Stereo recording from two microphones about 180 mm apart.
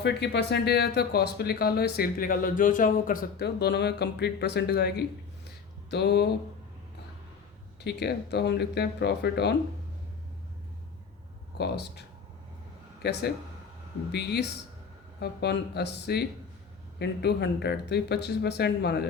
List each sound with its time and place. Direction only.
0.0 s speech: 75° left (ahead or behind)
7.9 s speech: 65° left (ahead or behind)
11.5 s speech: 65° left (ahead or behind)